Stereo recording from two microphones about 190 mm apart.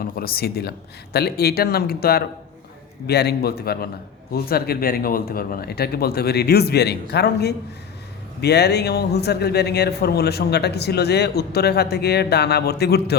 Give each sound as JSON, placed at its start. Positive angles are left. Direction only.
{"t": 0.0, "sound": "a man's voice", "side_deg": 50}